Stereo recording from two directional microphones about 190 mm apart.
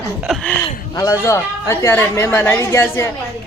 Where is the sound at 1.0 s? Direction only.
15° left (ahead or behind).